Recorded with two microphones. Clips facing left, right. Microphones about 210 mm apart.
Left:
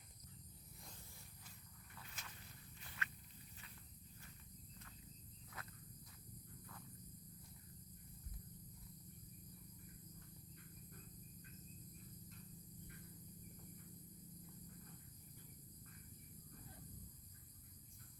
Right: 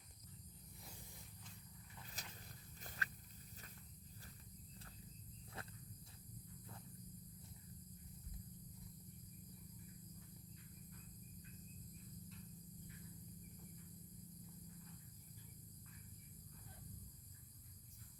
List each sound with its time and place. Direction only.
2.2 s walk: 40° right (ahead or behind)
2.8 s a sound: 40° right (ahead or behind)
5.6 s walk: 30° right (ahead or behind)